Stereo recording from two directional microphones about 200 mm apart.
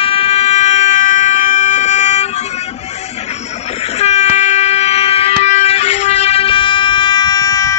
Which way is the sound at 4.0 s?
35° left (ahead or behind).